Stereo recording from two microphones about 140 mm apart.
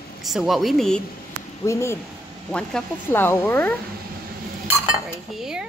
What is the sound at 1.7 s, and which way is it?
Speech, 20° left (ahead or behind).